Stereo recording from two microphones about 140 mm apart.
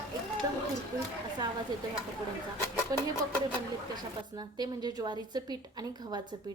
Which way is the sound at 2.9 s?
25° right (ahead or behind).